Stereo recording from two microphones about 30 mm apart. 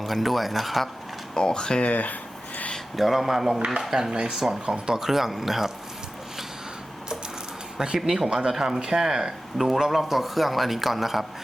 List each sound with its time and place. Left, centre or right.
0.0 s speech: centre
1.3 s speech: left
1.8 s speech: left
2.9 s speech: centre
4.6 s speech: right
4.9 s speech: centre
7.9 s speech: centre
9.6 s speech: centre